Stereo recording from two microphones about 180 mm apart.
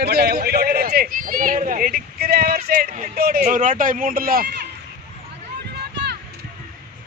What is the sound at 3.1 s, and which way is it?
Speech, 55° right (ahead or behind).